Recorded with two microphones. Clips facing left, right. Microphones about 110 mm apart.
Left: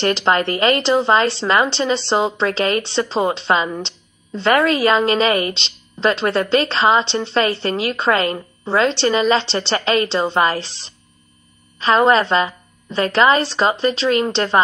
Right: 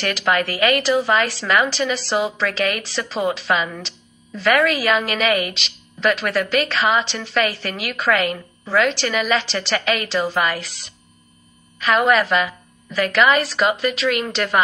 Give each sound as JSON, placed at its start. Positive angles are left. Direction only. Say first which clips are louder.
{"t": 0.0, "sound": "a woman's voice", "louder": "left 3 dB", "side_deg": 30}